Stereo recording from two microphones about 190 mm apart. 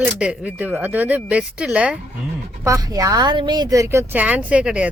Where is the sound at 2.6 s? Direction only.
15° right (ahead or behind).